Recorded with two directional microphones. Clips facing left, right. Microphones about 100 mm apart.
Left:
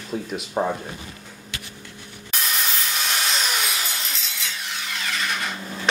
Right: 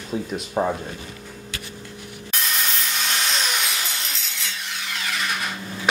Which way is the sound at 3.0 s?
5° left (ahead or behind).